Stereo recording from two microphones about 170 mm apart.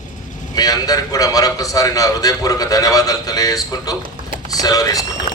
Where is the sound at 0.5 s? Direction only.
20° left (ahead or behind).